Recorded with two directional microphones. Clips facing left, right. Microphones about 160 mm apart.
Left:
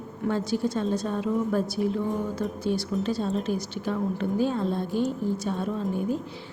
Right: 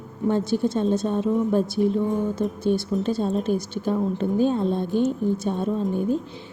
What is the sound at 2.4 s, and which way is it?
Speech, 55° right (ahead or behind).